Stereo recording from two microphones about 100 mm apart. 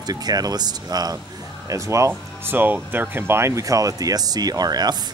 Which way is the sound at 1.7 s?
30° right (ahead or behind).